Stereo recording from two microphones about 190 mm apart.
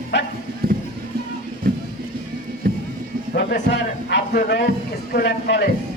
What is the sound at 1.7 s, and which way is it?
Music, 50° right (ahead or behind).